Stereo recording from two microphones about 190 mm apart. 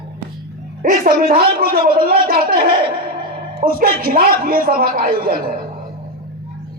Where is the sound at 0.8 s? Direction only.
45° right (ahead or behind).